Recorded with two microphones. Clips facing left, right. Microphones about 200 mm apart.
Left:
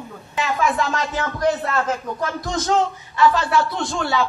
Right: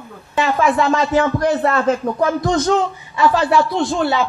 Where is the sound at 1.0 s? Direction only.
70° right (ahead or behind).